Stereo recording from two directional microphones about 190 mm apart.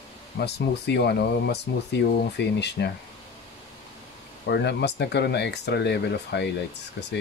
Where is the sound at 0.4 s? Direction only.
60° left (ahead or behind).